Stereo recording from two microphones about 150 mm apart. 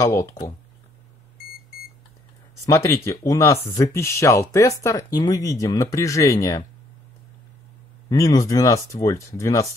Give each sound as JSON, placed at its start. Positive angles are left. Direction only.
{"t": 0.0, "sound": "speech", "side_deg": 20}
{"t": 2.6, "sound": "speech", "side_deg": 20}
{"t": 8.1, "sound": "speech", "side_deg": 25}